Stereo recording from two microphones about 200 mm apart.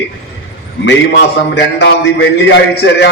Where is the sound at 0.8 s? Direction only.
55° left (ahead or behind).